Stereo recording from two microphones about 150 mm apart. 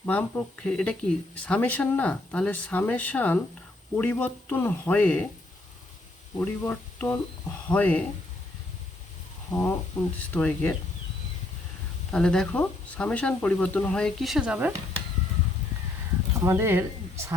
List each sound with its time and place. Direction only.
0.0 s speech: 10° left (ahead or behind)
6.3 s speech: 10° left (ahead or behind)
9.5 s speech: 15° left (ahead or behind)
12.1 s speech: 5° left (ahead or behind)
16.4 s a woman's voice: 15° right (ahead or behind)